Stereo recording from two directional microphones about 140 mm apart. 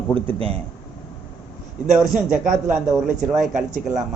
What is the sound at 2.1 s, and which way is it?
A man's voice, 70° right (ahead or behind).